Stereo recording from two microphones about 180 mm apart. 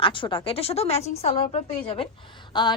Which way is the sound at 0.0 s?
30° left (ahead or behind).